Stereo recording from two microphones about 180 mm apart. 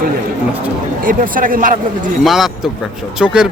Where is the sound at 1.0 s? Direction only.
50° right (ahead or behind).